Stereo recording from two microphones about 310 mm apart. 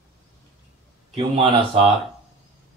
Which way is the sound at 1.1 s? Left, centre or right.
Centre.